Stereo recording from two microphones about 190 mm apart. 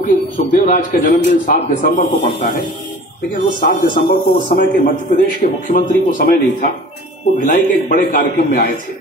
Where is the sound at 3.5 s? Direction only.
45° left (ahead or behind).